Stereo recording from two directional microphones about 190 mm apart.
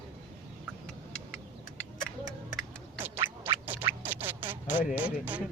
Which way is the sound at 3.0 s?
10° right (ahead or behind).